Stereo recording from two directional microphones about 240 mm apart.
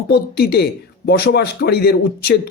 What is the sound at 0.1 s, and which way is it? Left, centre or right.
Speech, left.